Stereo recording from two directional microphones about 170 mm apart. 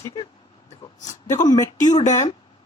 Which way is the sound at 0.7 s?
45° left (ahead or behind).